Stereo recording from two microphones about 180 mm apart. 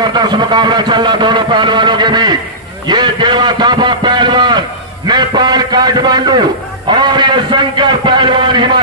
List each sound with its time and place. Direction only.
0.0 s a man's voice: 25° right (ahead or behind)